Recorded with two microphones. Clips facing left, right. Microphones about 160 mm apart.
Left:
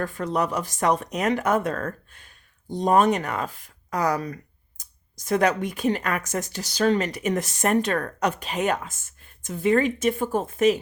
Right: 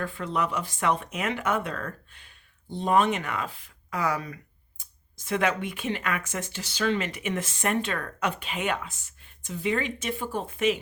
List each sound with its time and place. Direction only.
0.0 s speech: 40° left (ahead or behind)